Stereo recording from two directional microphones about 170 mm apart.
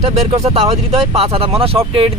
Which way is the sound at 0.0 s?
35° right (ahead or behind).